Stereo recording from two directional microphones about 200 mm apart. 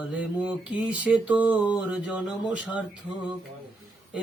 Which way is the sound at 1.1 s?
5° right (ahead or behind).